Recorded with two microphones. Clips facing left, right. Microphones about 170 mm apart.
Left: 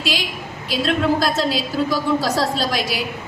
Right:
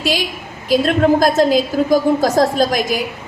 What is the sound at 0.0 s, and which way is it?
A woman's voice, 45° right (ahead or behind).